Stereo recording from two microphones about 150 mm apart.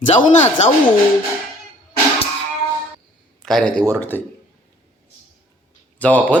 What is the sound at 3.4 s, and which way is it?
Speech, 5° left (ahead or behind).